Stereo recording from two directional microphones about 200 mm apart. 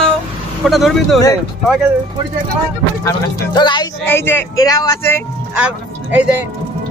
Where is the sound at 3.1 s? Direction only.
20° left (ahead or behind).